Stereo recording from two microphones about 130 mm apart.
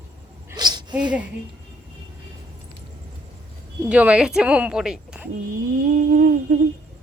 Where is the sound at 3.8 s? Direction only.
10° right (ahead or behind).